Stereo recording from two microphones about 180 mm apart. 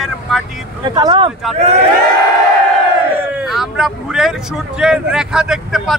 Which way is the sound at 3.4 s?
Centre (ahead or behind).